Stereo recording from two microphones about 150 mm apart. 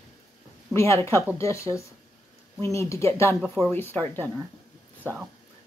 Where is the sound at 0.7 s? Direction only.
20° left (ahead or behind).